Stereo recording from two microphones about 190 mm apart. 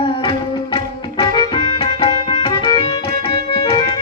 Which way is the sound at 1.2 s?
25° left (ahead or behind).